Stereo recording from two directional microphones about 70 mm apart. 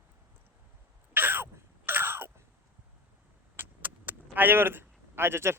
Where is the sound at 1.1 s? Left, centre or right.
Right.